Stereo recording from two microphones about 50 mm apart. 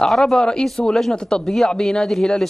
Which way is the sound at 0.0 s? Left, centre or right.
Centre.